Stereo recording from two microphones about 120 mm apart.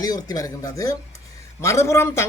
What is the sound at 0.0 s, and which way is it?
Speech, 30° left (ahead or behind).